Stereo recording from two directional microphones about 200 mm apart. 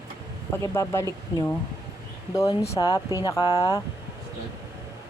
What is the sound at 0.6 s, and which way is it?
Speech, 15° left (ahead or behind).